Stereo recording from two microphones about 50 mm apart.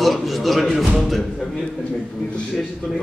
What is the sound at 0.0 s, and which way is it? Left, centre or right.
A man's voice, centre.